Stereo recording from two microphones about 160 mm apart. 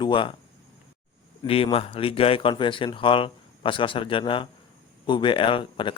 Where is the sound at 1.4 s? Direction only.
35° left (ahead or behind).